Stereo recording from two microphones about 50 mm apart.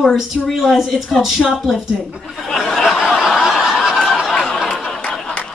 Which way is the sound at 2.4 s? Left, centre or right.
Centre.